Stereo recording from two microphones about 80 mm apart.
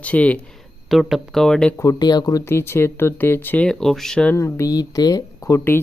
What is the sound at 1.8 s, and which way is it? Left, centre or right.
Speech, left.